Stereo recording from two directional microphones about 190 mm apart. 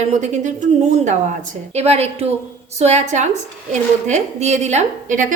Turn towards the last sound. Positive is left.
turn(degrees=-40)  # may be behind; listen again after turning